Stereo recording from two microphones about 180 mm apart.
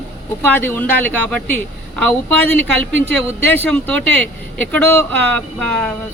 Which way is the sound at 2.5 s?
90° right.